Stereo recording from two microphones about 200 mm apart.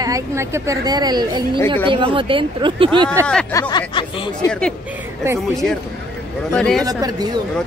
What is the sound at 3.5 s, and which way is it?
Speech, 20° left (ahead or behind).